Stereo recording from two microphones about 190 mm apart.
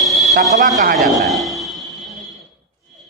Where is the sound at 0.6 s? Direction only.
40° right (ahead or behind).